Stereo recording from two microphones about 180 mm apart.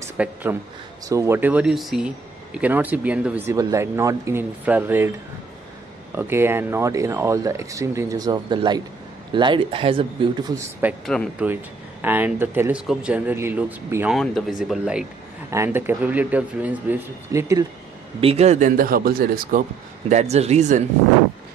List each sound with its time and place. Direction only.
0.2 s speech: 10° right (ahead or behind)
6.1 s speech: 10° right (ahead or behind); by 10.0 s 30° right (ahead or behind)
10.5 s speech: 10° right (ahead or behind)
14.1 s speech: centre (ahead or behind)
15.5 s speech: 15° right (ahead or behind)
18.2 s speech: 35° right (ahead or behind); by 19.6 s 55° right (ahead or behind)
20.1 s speech: 40° right (ahead or behind)